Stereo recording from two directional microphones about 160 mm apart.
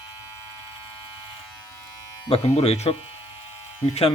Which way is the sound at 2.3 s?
40° left (ahead or behind).